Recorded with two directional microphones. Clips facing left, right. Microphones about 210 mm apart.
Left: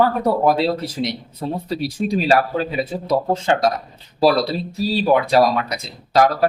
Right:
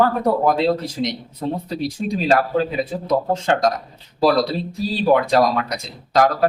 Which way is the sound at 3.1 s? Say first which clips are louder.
Left 1 dB; 5° left (ahead or behind).